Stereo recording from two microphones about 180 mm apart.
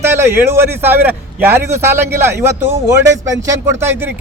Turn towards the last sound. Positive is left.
turn(degrees=-10)  # may be behind; listen again after turning